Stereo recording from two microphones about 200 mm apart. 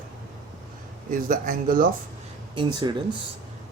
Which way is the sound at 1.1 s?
40° right (ahead or behind).